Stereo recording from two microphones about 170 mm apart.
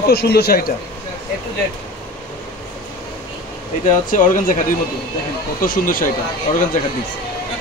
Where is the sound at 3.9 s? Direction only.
50° left (ahead or behind).